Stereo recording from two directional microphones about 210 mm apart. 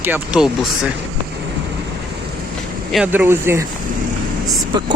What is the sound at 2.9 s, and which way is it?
Speech, 5° right (ahead or behind).